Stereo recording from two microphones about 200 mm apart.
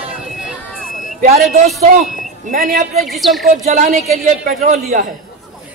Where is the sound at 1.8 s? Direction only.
40° right (ahead or behind).